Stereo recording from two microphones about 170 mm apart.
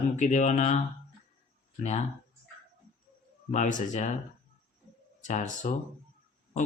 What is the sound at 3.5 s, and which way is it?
Speech, 45° left (ahead or behind).